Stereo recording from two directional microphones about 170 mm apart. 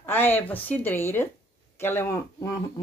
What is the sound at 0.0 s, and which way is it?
Speech, 10° left (ahead or behind).